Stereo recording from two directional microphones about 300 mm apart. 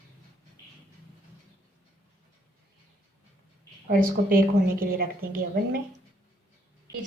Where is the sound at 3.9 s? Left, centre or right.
Right.